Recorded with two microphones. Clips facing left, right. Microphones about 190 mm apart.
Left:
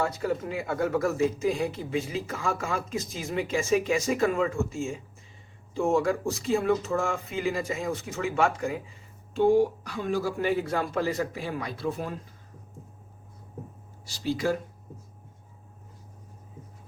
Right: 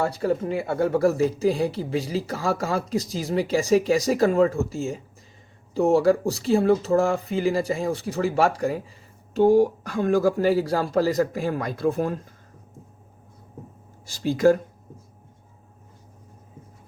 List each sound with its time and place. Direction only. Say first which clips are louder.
0.0 s speech: right 4 dB; 30° right (ahead or behind); by 12.2 s 45° right (ahead or behind)
14.0 s speech: right 9 dB; 50° right (ahead or behind)